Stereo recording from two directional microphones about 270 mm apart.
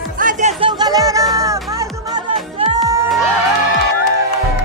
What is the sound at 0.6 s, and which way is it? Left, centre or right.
Music, centre.